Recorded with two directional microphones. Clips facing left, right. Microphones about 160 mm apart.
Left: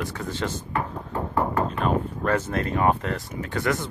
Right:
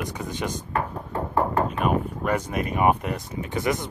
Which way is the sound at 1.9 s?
15° right (ahead or behind).